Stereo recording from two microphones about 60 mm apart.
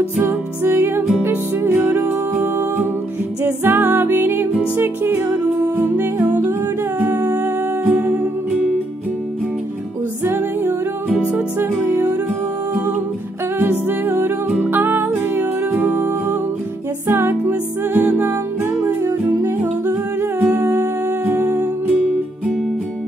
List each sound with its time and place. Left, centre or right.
0.2 s music: right
7.0 s humming: right
10.2 s music: right
13.6 s music: right
19.6 s humming: right
21.3 s music: right